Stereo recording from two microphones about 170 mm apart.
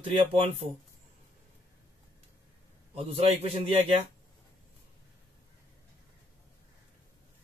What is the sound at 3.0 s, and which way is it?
Speech, 35° right (ahead or behind).